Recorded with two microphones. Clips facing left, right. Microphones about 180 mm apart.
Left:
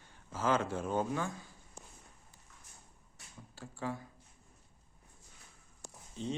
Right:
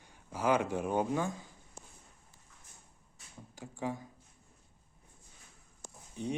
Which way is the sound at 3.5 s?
15° right (ahead or behind).